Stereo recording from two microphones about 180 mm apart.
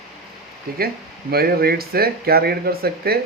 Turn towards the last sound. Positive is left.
turn(degrees=-60)  # may be behind; listen again after turning